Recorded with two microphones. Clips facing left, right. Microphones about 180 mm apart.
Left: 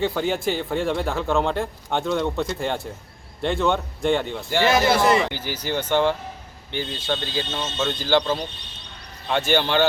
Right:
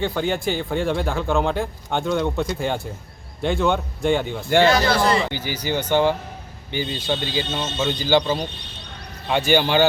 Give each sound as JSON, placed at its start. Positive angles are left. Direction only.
{"t": 0.0, "sound": "a man's voice", "side_deg": 0}
{"t": 4.7, "sound": "a man's voice", "side_deg": 20}
{"t": 5.3, "sound": "a man's voice", "side_deg": 0}
{"t": 9.5, "sound": "speech", "side_deg": -5}